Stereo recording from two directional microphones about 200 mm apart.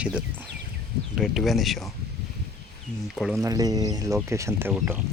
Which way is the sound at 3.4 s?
15° right (ahead or behind).